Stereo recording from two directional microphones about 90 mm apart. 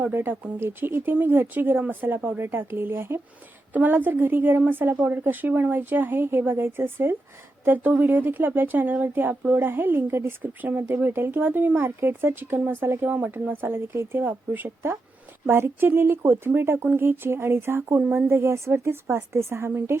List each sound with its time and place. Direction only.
0.0 s speech: 25° right (ahead or behind)